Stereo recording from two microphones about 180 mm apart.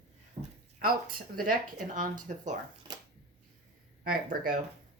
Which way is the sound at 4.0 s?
55° right (ahead or behind).